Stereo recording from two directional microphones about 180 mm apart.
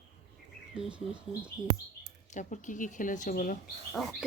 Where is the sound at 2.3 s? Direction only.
45° left (ahead or behind).